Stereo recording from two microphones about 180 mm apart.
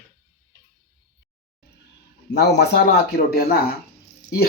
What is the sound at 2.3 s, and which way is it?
Speech, 70° left (ahead or behind).